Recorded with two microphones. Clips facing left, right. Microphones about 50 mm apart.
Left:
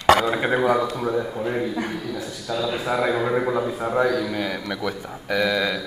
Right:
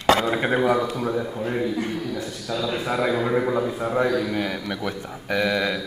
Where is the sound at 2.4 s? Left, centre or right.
Left.